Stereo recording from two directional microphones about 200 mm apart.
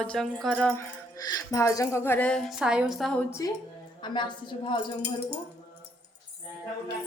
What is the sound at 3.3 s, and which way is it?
A woman's voice, 15° left (ahead or behind).